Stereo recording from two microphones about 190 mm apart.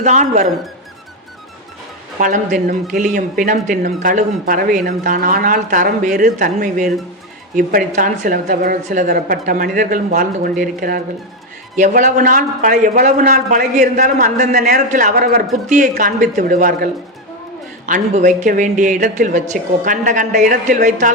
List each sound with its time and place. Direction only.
0.0 s speech: 40° right (ahead or behind)
2.1 s a man's voice: 40° right (ahead or behind)